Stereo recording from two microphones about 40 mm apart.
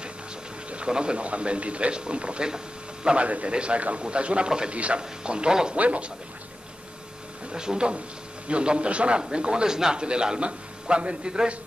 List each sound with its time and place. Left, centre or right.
0.7 s a man's voice: right
3.2 s a man's voice: right
5.8 s speech: right
7.5 s a man's voice: centre